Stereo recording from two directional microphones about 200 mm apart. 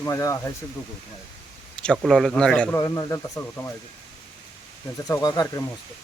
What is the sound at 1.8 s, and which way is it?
Speech, 5° left (ahead or behind).